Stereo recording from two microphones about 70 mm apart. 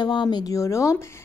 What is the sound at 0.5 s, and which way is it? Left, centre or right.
Speech, left.